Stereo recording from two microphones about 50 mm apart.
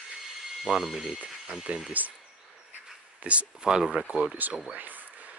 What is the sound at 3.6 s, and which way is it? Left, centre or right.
Speech, centre.